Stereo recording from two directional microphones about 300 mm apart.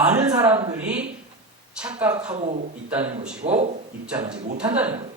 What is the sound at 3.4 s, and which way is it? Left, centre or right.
Speech, right.